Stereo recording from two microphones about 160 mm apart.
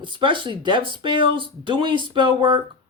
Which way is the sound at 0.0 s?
30° right (ahead or behind).